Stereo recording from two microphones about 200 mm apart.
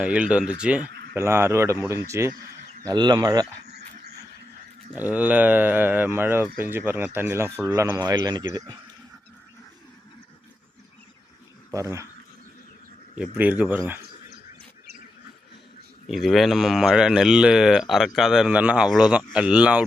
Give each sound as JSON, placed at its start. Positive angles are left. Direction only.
{"t": 0.0, "sound": "speech", "side_deg": -5}
{"t": 4.9, "sound": "speech", "side_deg": -10}
{"t": 11.7, "sound": "speech", "side_deg": -15}
{"t": 13.3, "sound": "speech", "side_deg": -10}
{"t": 16.0, "sound": "speech", "side_deg": 0}